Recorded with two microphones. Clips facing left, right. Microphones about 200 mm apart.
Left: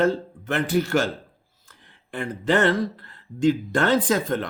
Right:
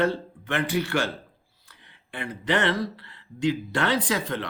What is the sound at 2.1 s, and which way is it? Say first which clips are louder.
Speech: left 4 dB; 45° left (ahead or behind).